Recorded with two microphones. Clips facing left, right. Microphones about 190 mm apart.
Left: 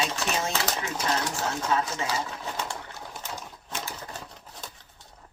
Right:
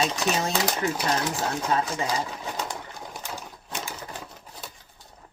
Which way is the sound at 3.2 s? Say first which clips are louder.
Right 1 dB; 10° right (ahead or behind).